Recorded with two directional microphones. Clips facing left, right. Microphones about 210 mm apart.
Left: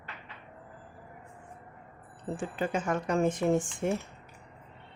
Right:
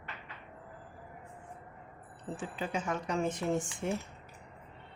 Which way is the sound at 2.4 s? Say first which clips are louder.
Left 5 dB; 50° left (ahead or behind).